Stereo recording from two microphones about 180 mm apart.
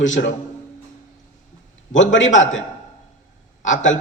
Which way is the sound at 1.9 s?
90° left.